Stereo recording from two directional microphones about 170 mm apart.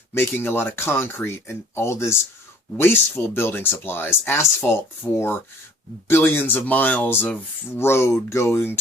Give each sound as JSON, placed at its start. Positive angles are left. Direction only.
{"t": 0.1, "sound": "speech", "side_deg": 15}